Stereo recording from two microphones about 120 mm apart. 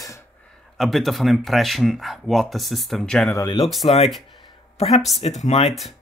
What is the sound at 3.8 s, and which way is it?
Speech, 55° left (ahead or behind).